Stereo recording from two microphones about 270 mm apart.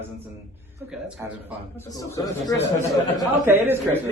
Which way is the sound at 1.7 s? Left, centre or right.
Centre.